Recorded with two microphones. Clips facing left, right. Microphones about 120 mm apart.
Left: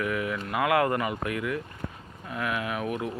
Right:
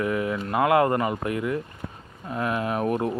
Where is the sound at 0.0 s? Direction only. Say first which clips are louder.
Right 4 dB; 30° right (ahead or behind).